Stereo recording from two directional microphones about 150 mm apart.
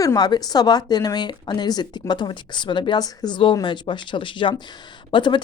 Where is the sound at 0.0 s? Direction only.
25° left (ahead or behind).